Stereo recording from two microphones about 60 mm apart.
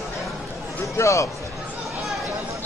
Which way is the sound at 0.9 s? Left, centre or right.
Left.